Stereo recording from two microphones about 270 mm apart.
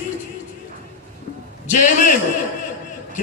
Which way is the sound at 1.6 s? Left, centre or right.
Left.